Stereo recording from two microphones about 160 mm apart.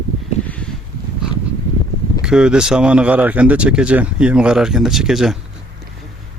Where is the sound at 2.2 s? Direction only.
5° right (ahead or behind).